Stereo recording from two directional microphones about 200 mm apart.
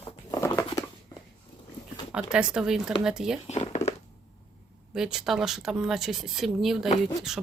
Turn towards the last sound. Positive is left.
turn(degrees=0)  # may be behind; listen again after turning